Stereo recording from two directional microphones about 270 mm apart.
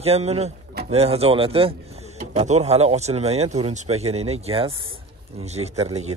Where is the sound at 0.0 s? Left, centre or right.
Right.